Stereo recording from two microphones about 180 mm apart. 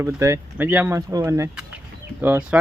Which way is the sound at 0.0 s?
15° right (ahead or behind).